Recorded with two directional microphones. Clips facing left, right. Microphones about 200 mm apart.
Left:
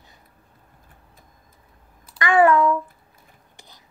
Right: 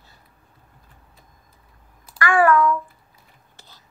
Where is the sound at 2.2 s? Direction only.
20° left (ahead or behind).